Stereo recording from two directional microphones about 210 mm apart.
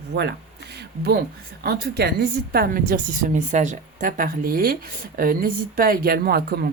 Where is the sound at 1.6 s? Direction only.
50° right (ahead or behind).